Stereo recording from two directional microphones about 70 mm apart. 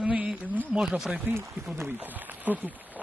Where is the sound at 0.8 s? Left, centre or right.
Centre.